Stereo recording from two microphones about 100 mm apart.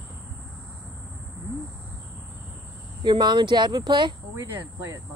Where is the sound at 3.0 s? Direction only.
45° right (ahead or behind).